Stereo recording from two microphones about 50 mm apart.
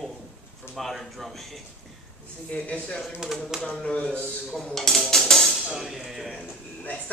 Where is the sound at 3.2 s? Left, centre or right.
Centre.